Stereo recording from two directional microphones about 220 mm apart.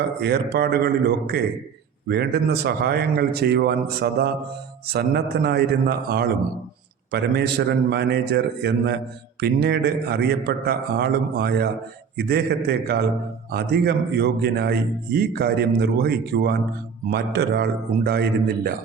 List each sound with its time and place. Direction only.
0.2 s a man's voice: 45° right (ahead or behind)